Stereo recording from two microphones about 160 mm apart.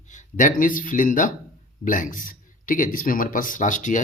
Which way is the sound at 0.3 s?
55° left (ahead or behind).